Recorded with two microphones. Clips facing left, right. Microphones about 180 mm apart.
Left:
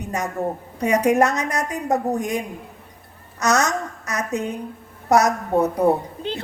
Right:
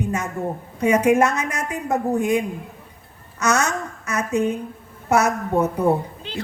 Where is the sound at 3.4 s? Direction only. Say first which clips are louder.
Left 1 dB; 35° left (ahead or behind).